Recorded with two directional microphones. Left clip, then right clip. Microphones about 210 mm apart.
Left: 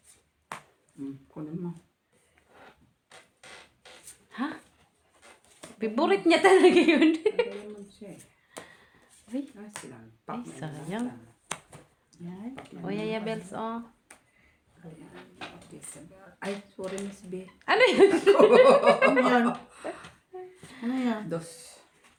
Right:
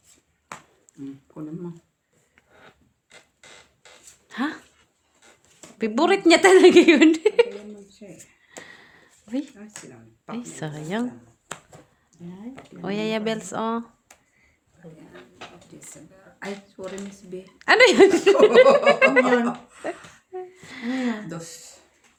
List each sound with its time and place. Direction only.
4.3 s a sound: 55° right (ahead or behind)
5.8 s speech: 55° right (ahead or behind)
8.1 s a sound: centre (ahead or behind)
8.6 s a sound: 55° right (ahead or behind)
10.2 s speech: 55° right (ahead or behind)
11.5 s finger snapping: 5° right (ahead or behind)
12.8 s speech: 55° right (ahead or behind)
16.8 s speech: 40° right (ahead or behind)
17.6 s speech: 55° right (ahead or behind)
19.8 s a sound: 55° right (ahead or behind)
20.6 s speech: 55° right (ahead or behind)
21.2 s speech: 35° right (ahead or behind)